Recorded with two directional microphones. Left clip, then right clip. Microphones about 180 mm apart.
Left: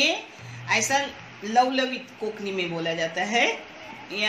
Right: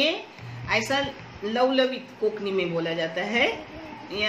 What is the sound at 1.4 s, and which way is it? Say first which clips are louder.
A woman's voice: even; 60° left (ahead or behind).